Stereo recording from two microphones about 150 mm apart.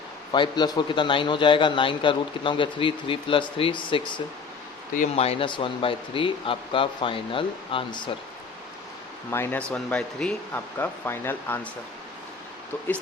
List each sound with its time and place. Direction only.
0.3 s a man's voice: 30° left (ahead or behind)
9.3 s speech: 15° left (ahead or behind)